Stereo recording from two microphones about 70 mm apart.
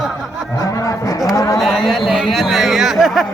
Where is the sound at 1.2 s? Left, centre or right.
Left.